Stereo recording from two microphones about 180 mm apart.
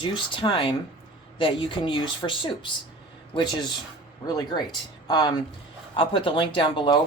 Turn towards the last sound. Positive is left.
turn(degrees=25)  # may be behind; listen again after turning